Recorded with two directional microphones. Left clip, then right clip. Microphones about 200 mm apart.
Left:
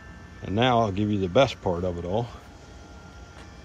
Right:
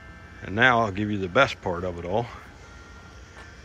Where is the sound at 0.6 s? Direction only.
10° left (ahead or behind).